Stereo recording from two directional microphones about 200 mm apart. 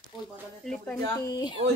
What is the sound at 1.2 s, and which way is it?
Speech, 20° left (ahead or behind).